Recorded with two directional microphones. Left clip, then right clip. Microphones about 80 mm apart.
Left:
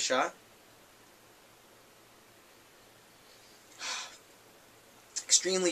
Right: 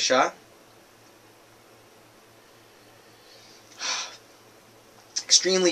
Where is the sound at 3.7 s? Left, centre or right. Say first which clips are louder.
Right 8 dB; centre.